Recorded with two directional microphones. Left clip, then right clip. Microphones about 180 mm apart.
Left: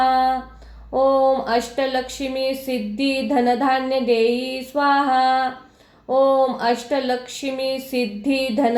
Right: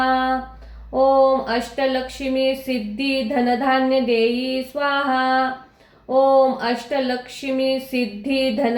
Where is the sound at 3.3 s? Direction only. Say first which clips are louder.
Left 1 dB; 30° left (ahead or behind).